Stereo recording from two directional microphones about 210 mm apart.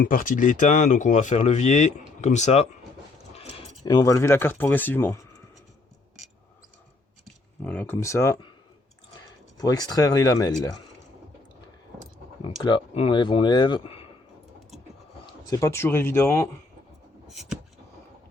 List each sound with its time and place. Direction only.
0.0 s speech: 40° left (ahead or behind)
3.8 s speech: 15° left (ahead or behind)
7.6 s speech: 5° left (ahead or behind)
9.6 s speech: 20° left (ahead or behind)
12.6 s speech: 25° left (ahead or behind)
15.4 s speech: 15° left (ahead or behind)
17.3 s a sound: centre (ahead or behind)